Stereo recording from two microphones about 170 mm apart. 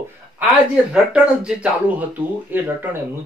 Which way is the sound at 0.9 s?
5° right (ahead or behind).